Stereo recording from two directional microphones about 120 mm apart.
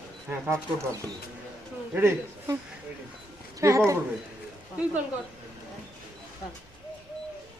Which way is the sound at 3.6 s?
25° right (ahead or behind).